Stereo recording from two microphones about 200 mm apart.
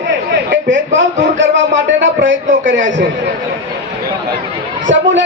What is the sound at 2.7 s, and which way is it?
Speech, 70° right (ahead or behind).